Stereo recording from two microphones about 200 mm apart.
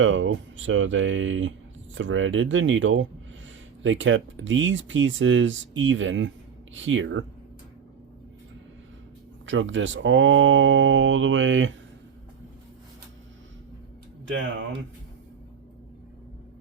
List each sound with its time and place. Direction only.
0.0 s speech: 75° right (ahead or behind)
9.5 s speech: 70° right (ahead or behind)